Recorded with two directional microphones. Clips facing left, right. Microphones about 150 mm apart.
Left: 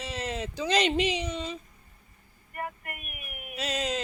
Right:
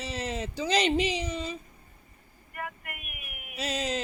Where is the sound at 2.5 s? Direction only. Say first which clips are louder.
Left 2 dB; 40° left (ahead or behind).